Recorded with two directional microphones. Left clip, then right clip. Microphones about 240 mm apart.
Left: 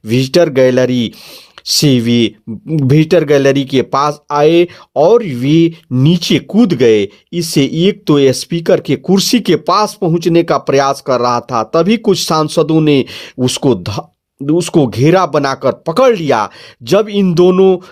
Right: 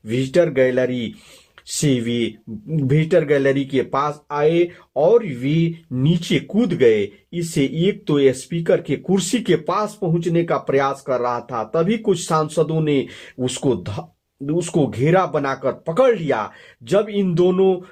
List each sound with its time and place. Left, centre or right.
0.1 s speech: left